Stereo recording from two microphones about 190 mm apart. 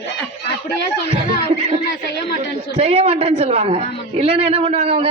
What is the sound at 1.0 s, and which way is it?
Speech, 30° right (ahead or behind).